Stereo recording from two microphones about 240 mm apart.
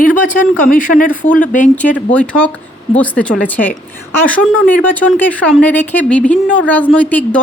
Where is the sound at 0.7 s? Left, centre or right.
Left.